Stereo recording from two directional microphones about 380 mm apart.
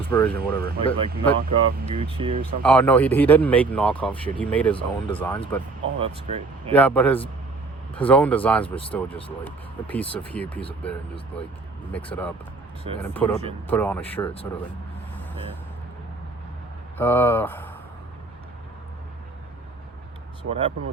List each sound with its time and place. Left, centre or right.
0.0 s speech: centre
1.4 s speech: centre
2.6 s speech: centre
6.0 s speech: centre
6.7 s speech: centre
17.0 s speech: centre
20.5 s speech: centre